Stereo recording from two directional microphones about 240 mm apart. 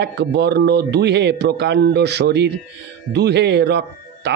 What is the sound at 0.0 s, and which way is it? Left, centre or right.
Speech, right.